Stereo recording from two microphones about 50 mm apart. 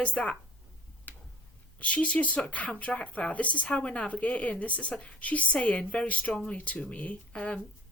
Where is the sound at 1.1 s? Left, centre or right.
Left.